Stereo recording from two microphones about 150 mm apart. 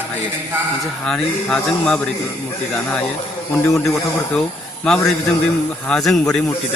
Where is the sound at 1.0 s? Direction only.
5° left (ahead or behind).